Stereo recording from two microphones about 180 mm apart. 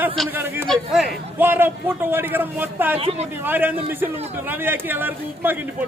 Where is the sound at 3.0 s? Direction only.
35° right (ahead or behind).